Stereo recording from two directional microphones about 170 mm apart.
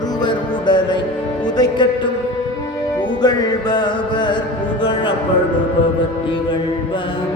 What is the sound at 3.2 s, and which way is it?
Music, 25° left (ahead or behind).